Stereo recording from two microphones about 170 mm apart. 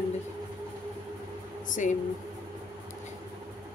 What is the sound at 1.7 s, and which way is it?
Speech, 50° left (ahead or behind).